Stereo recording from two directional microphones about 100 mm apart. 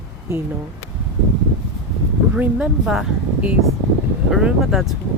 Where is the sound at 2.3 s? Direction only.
15° right (ahead or behind).